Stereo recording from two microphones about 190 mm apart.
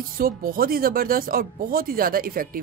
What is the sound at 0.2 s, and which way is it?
A woman's voice, 50° right (ahead or behind).